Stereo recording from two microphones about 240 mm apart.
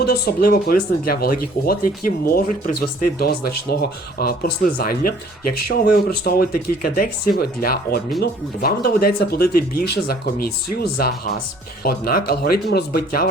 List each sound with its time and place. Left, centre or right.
0.0 s speech: left